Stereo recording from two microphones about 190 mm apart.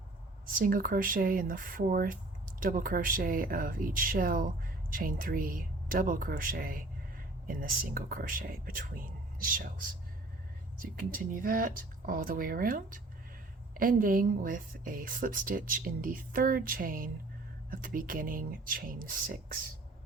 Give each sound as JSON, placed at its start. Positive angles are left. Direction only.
{"t": 0.4, "sound": "speech", "side_deg": -50}